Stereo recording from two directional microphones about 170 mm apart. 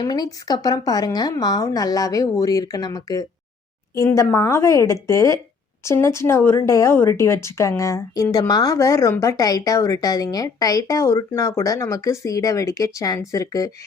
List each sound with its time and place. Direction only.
0.0 s a woman's voice: 20° left (ahead or behind)